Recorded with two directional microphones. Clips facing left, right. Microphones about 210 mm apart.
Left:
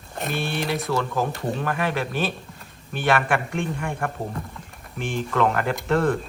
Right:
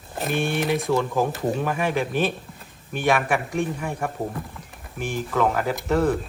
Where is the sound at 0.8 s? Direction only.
15° right (ahead or behind).